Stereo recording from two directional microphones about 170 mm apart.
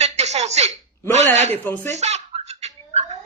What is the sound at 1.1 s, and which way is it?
Speech, 40° right (ahead or behind).